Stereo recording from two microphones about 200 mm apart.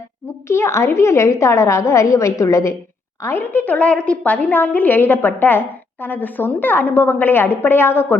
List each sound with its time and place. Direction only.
0.4 s a woman's voice: 15° left (ahead or behind)